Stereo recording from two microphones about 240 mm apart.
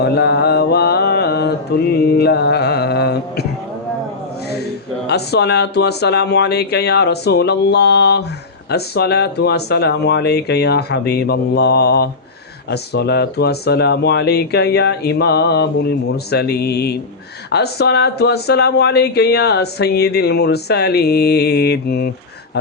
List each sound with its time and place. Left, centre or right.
0.0 s mantra: left
5.0 s speech: left